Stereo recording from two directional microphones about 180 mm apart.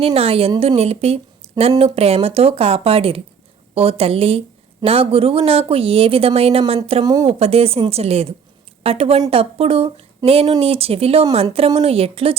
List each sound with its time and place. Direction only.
0.0 s a woman's voice: 35° right (ahead or behind)
7.3 s a woman's voice: 35° right (ahead or behind)